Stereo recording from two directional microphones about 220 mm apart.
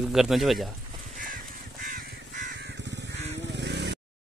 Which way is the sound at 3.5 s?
50° right (ahead or behind).